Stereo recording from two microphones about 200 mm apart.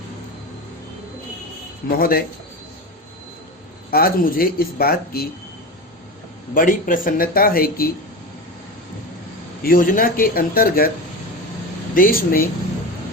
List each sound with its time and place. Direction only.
2.0 s speech: 45° left (ahead or behind)
3.9 s speech: 50° left (ahead or behind)
6.5 s speech: 45° left (ahead or behind)
9.6 s speech: 45° left (ahead or behind)
11.9 s speech: 45° left (ahead or behind)